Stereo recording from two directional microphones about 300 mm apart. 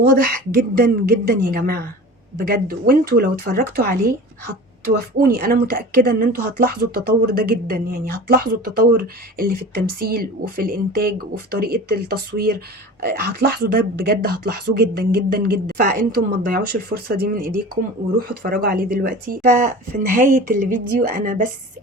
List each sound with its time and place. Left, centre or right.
0.0 s a woman's voice: right